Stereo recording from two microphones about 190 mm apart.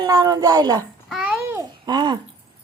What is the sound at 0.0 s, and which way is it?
Speech, 20° right (ahead or behind).